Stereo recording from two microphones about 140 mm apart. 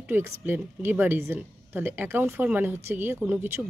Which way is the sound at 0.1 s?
15° right (ahead or behind).